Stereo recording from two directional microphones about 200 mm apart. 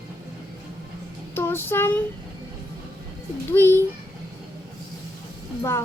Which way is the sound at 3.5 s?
10° left (ahead or behind).